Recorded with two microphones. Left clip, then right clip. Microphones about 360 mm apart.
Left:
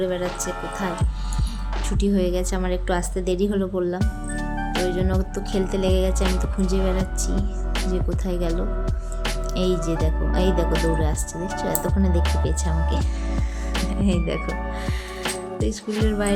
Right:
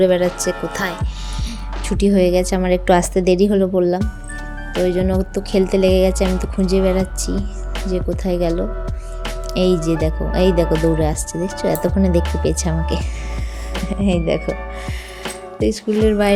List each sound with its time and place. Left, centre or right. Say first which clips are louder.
0.0 s a woman's voice: right 10 dB; centre
14.0 s a woman's voice: right 9 dB; centre
16.0 s speech: right 9 dB; centre